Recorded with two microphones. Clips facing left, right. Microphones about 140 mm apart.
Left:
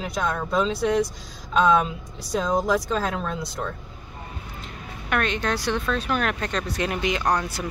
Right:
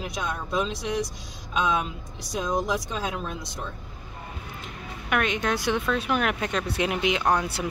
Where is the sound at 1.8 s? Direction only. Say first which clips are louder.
Left 5 dB; 60° left (ahead or behind).